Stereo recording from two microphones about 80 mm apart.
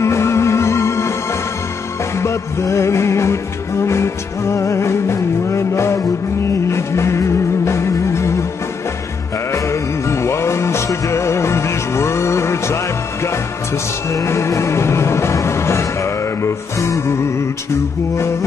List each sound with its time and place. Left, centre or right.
0.0 s music: left
2.1 s music: left
9.5 s music: left
14.1 s music: left